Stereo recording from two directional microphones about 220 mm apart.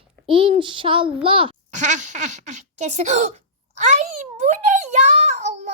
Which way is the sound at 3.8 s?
35° right (ahead or behind).